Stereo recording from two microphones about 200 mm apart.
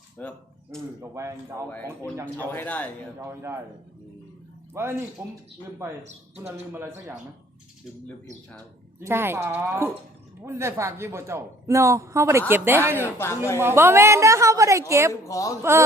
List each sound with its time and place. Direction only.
0.2 s speech: 5° left (ahead or behind)
1.1 s a man's voice: 15° right (ahead or behind)
2.2 s speech: 10° left (ahead or behind)
3.2 s a man's voice: 15° right (ahead or behind)
4.7 s a man's voice: 10° right (ahead or behind)
9.0 s a man's voice: 10° right (ahead or behind)
13.0 s speech: 10° left (ahead or behind)
13.6 s a man's voice: 10° right (ahead or behind)
15.1 s speech: 15° left (ahead or behind)